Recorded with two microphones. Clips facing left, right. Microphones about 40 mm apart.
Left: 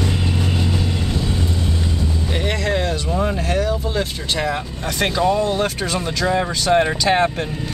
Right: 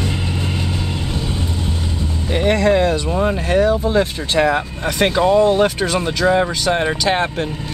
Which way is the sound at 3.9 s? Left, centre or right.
Right.